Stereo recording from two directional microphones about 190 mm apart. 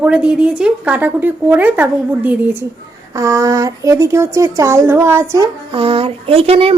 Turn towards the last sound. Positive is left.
turn(degrees=-30)  # may be behind; listen again after turning